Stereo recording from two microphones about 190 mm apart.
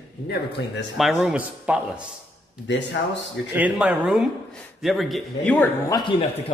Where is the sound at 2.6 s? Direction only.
70° left (ahead or behind).